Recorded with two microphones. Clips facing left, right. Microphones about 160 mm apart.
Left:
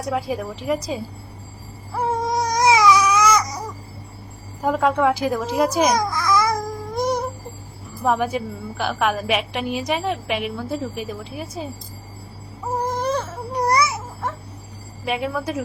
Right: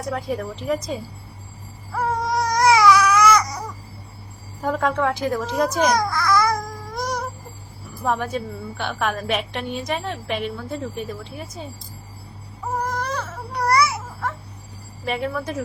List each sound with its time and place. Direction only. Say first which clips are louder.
0.1 s a woman's voice: left 2 dB; 5° left (ahead or behind)
2.0 s baby cry: left 1 dB; 20° left (ahead or behind)
4.6 s a woman's voice: left 3 dB; 5° left (ahead or behind)
6.0 s babbling: even; 20° left (ahead or behind)
8.0 s a woman's voice: left 3 dB; 5° left (ahead or behind)
12.9 s baby cry: left 4 dB; 25° left (ahead or behind)
15.0 s a woman's voice: left 1 dB; centre (ahead or behind)